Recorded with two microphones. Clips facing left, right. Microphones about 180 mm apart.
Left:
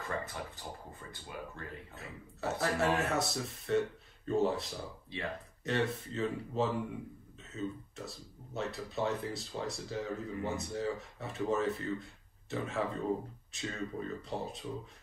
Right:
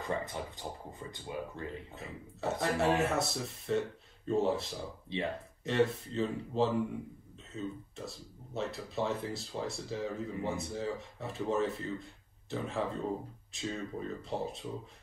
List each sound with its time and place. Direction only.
0.0 s speech: 20° right (ahead or behind)
2.0 s speech: centre (ahead or behind)
5.1 s speech: 20° right (ahead or behind)
5.6 s speech: centre (ahead or behind)